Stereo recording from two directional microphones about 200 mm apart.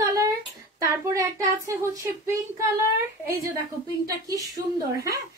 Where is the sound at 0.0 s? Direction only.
15° right (ahead or behind).